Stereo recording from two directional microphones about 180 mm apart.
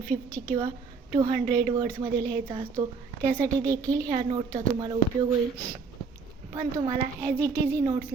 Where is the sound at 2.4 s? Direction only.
30° right (ahead or behind).